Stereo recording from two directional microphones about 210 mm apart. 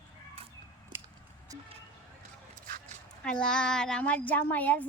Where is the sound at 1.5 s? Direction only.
15° right (ahead or behind).